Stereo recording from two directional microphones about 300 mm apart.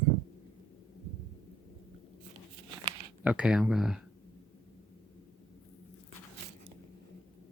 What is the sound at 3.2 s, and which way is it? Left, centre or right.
Speech, centre.